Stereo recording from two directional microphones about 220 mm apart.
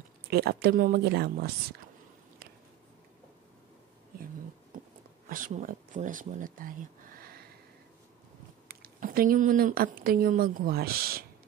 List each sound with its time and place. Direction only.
0.3 s speech: 45° right (ahead or behind)
4.7 s a sound: 35° right (ahead or behind)
5.3 s speech: 40° right (ahead or behind)
8.6 s speech: 40° right (ahead or behind)